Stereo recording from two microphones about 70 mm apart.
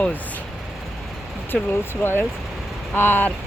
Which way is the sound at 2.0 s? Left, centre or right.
Left.